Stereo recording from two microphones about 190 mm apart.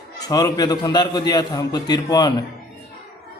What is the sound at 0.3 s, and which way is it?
A man's voice, 20° left (ahead or behind).